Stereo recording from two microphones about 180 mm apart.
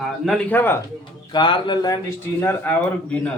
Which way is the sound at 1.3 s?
25° left (ahead or behind).